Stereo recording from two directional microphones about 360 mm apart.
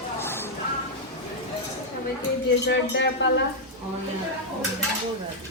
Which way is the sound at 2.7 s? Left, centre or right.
Left.